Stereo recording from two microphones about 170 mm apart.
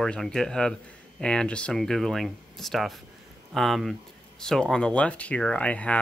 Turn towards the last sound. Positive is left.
turn(degrees=10)  # may be behind; listen again after turning